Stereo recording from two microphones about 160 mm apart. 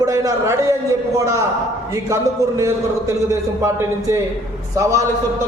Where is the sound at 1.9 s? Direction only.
20° right (ahead or behind).